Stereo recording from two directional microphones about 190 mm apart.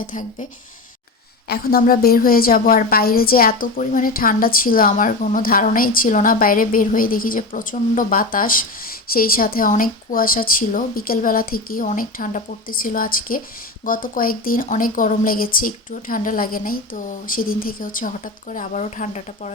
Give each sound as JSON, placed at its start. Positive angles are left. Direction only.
{"t": 0.1, "sound": "a woman's voice", "side_deg": 40}
{"t": 1.5, "sound": "a woman's voice", "side_deg": 50}